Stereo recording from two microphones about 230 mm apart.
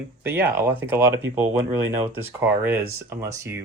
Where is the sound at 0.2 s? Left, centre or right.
Centre.